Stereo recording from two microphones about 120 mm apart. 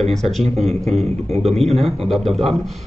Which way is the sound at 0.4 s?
60° right (ahead or behind).